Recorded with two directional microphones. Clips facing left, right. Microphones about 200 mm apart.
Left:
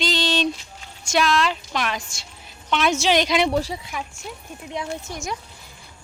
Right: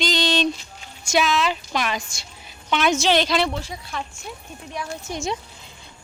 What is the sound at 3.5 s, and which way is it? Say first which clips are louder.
Speech: left 7 dB; 35° left (ahead or behind).